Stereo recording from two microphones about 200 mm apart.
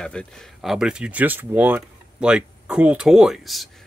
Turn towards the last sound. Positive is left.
turn(degrees=0)  # may be behind; listen again after turning